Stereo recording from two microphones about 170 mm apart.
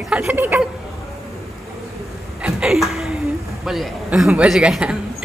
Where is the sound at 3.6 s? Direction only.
Centre (ahead or behind).